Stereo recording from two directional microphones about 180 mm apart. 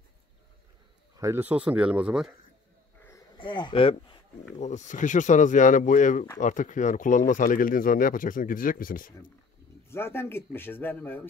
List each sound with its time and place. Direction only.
1.1 s speech: 15° right (ahead or behind)
3.0 s a sound: 15° left (ahead or behind)
3.3 s speech: 25° left (ahead or behind)
4.6 s speech: 40° left (ahead or behind)
9.8 s speech: 15° left (ahead or behind)